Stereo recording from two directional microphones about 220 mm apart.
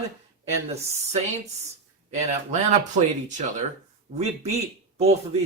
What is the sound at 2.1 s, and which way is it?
Speech, 30° right (ahead or behind).